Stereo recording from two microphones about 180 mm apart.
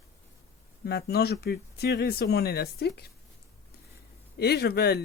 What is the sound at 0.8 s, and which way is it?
Speech, 60° left (ahead or behind).